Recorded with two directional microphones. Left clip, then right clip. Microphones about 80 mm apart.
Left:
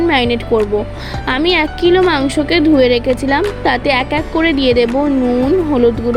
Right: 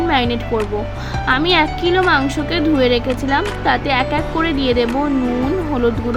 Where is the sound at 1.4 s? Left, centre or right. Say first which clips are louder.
Left 4 dB; left.